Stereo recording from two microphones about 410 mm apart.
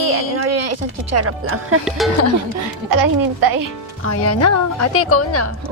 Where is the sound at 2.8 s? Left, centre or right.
Right.